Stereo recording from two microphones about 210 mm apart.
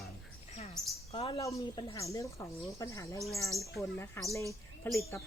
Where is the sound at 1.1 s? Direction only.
25° left (ahead or behind).